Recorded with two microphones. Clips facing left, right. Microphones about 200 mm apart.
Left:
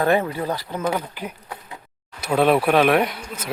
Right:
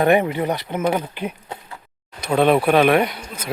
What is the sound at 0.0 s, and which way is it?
Speech, 15° right (ahead or behind).